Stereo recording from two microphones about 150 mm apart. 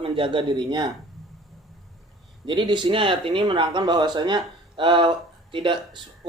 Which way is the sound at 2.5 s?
30° right (ahead or behind).